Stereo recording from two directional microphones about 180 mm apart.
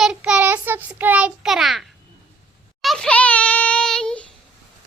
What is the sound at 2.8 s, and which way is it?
Child singing, centre (ahead or behind).